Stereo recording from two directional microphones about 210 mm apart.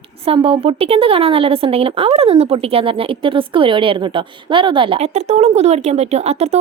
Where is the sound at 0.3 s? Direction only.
25° right (ahead or behind).